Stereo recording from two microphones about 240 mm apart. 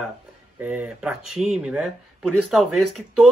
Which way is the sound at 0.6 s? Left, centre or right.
Centre.